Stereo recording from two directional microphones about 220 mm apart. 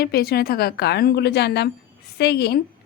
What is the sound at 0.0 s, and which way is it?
A woman's voice, 45° left (ahead or behind).